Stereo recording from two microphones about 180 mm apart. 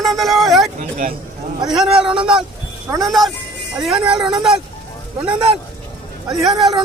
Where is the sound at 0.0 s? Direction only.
Centre (ahead or behind).